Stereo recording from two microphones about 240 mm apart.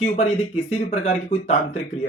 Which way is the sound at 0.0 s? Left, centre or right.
Left.